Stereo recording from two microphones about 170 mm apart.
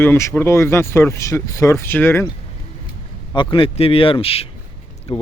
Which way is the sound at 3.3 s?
30° left (ahead or behind).